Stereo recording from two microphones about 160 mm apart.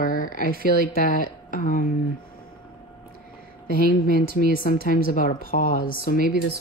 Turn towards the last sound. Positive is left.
turn(degrees=60)  # may be behind; listen again after turning